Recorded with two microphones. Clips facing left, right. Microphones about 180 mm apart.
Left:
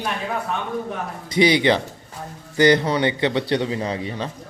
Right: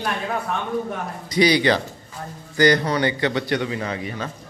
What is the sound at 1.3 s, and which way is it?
Speech, 25° left (ahead or behind).